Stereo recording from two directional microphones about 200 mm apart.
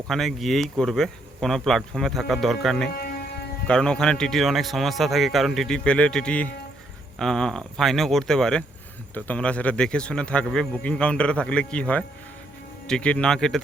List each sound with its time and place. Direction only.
0.1 s speech: centre (ahead or behind)
2.9 s music: 50° left (ahead or behind)
3.7 s speech: 5° left (ahead or behind)